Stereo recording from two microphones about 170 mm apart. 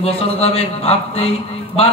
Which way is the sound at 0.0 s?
35° left (ahead or behind).